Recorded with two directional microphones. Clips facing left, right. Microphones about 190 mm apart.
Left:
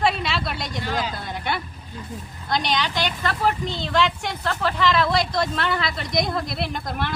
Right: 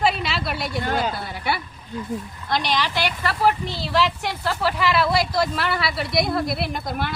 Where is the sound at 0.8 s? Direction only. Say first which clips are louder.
Right 3 dB; 50° right (ahead or behind).